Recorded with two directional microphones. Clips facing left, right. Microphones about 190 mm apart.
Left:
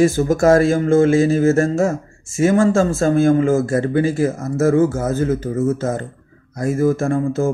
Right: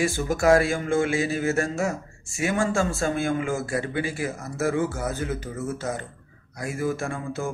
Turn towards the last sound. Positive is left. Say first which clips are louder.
# left 11 dB
turn(degrees=45)  # may be behind; listen again after turning